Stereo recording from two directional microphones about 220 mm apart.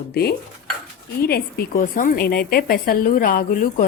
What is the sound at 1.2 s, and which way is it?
A woman's voice, 45° left (ahead or behind).